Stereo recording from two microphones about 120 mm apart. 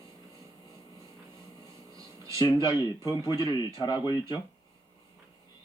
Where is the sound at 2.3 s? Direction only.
40° left (ahead or behind).